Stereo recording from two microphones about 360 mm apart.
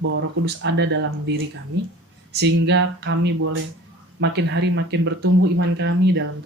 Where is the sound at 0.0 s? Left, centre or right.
Right.